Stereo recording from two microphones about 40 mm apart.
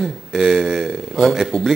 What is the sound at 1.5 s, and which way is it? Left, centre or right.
Speech, left.